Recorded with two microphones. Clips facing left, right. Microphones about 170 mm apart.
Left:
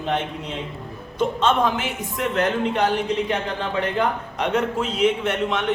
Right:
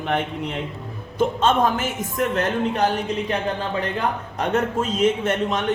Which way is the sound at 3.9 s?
45° right (ahead or behind).